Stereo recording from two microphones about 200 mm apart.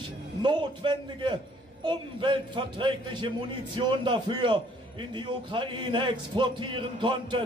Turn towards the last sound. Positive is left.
turn(degrees=-25)  # may be behind; listen again after turning